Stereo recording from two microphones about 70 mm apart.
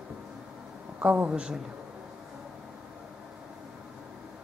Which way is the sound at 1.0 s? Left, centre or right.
Centre.